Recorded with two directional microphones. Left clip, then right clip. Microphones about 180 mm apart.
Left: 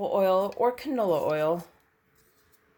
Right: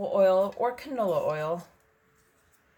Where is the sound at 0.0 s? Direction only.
45° left (ahead or behind).